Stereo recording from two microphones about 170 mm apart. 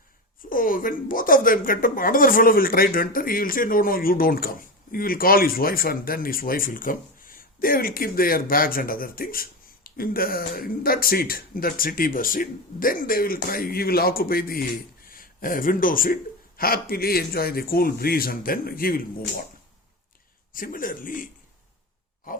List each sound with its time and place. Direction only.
0.5 s speech: 55° left (ahead or behind)
20.5 s speech: 55° left (ahead or behind)
22.3 s pig: 55° left (ahead or behind)